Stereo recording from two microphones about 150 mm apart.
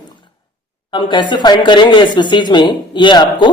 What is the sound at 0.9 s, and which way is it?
Speech, 30° left (ahead or behind).